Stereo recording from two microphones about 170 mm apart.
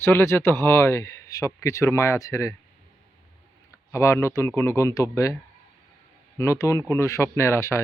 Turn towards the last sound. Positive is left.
turn(degrees=15)  # may be behind; listen again after turning